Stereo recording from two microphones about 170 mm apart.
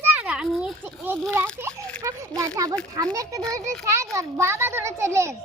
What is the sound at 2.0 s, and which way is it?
A child's voice, 20° right (ahead or behind).